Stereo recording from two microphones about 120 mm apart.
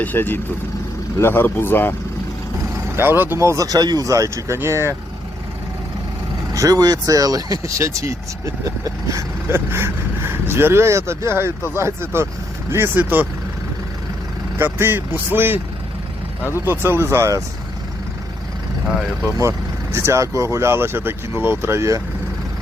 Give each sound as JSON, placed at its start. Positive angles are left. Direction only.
{"t": 0.0, "sound": "speech", "side_deg": 15}
{"t": 2.9, "sound": "speech", "side_deg": -20}
{"t": 6.5, "sound": "speech", "side_deg": -30}
{"t": 14.6, "sound": "speech", "side_deg": -20}
{"t": 16.4, "sound": "speech", "side_deg": 25}
{"t": 16.6, "sound": "speech", "side_deg": -20}
{"t": 19.4, "sound": "speech", "side_deg": -25}